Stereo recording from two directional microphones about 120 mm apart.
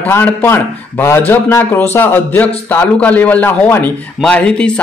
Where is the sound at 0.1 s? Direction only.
20° left (ahead or behind).